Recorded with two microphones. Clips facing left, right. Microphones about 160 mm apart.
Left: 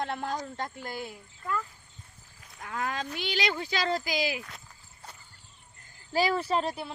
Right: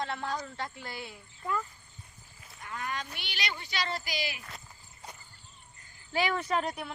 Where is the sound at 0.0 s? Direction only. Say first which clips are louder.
Left 2 dB; 50° left (ahead or behind).